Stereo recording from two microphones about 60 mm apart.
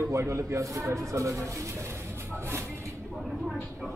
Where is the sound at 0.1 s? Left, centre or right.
Right.